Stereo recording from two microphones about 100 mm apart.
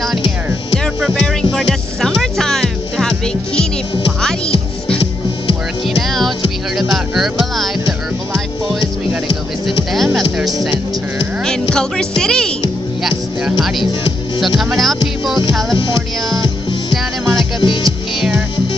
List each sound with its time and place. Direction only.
1.0 s music: 5° left (ahead or behind)
5.9 s music: centre (ahead or behind)
9.9 s music: centre (ahead or behind)
11.7 s speech: 5° left (ahead or behind)
16.9 s music: centre (ahead or behind)
17.6 s music: 55° left (ahead or behind)